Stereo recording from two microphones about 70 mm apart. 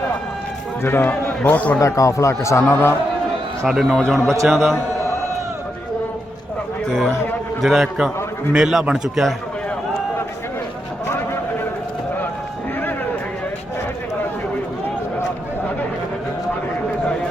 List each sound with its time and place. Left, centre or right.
0.8 s a man's voice: left
1.5 s a man's voice: left
1.8 s speech: left
3.7 s a man's voice: centre
6.9 s a man's voice: centre
11.0 s a sound: left